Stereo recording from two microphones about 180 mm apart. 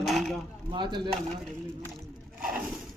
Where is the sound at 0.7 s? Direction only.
25° right (ahead or behind).